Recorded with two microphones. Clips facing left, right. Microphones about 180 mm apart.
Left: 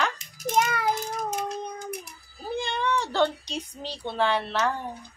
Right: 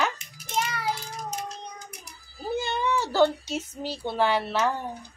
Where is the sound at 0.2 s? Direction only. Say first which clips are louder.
Left 5 dB; 45° left (ahead or behind).